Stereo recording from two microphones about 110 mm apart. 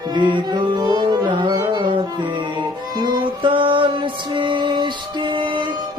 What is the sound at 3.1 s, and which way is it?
Music, 50° right (ahead or behind).